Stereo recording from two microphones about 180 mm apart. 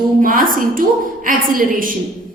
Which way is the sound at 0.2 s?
50° right (ahead or behind).